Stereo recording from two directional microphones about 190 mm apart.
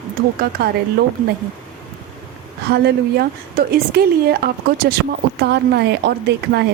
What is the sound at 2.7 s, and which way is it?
A woman's voice, 55° right (ahead or behind).